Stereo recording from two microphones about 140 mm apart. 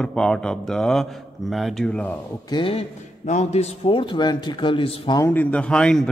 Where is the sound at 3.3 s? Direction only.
55° left (ahead or behind); by 5.2 s 35° left (ahead or behind).